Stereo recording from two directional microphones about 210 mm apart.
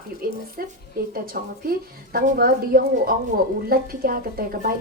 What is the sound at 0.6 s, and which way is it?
A woman's voice, 45° right (ahead or behind).